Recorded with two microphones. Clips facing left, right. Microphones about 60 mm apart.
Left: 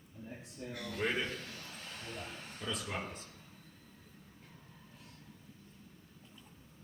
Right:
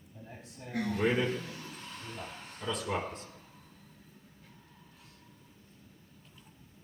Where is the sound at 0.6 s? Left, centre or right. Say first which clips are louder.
Right 9 dB; right.